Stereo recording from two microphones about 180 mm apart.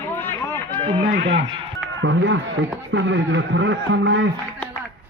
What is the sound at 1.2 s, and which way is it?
A man's voice, 80° right.